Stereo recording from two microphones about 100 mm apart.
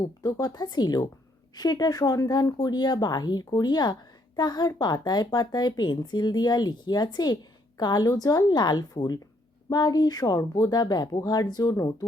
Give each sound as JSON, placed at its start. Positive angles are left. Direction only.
{"t": 0.2, "sound": "speech", "side_deg": 40}